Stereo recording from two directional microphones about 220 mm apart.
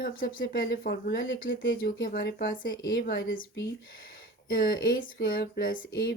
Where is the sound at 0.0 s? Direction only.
40° left (ahead or behind).